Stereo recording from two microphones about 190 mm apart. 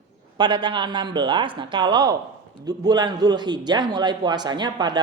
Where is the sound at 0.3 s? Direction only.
25° right (ahead or behind).